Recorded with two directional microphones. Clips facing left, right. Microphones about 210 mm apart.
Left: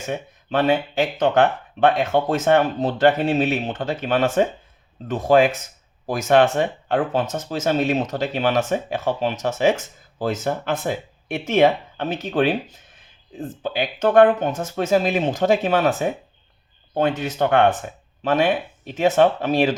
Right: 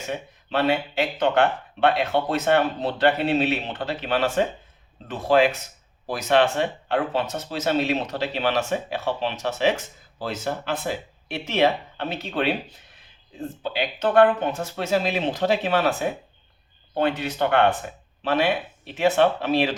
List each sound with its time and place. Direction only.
0.5 s speech: 45° left (ahead or behind)
13.6 s speech: 45° left (ahead or behind)
16.9 s speech: 45° left (ahead or behind)